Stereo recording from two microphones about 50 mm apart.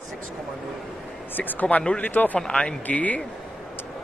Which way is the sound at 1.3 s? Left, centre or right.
Left.